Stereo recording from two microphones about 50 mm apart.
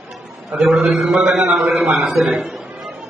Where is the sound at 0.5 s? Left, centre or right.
Centre.